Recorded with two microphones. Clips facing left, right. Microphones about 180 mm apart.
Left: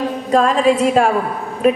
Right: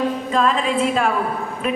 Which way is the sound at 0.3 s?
40° left (ahead or behind).